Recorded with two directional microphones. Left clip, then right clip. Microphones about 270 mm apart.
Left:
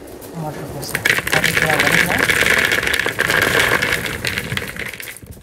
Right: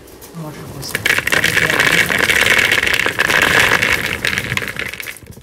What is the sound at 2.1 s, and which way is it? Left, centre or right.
Vehicle, centre.